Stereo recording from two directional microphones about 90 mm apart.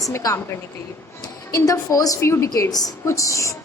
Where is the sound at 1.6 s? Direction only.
40° left (ahead or behind).